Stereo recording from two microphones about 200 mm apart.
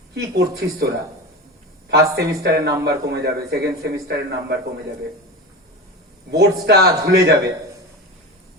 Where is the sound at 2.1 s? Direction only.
55° right (ahead or behind).